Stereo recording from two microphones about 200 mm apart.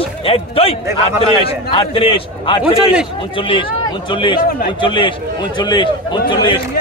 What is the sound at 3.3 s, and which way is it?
A man's voice, 25° left (ahead or behind).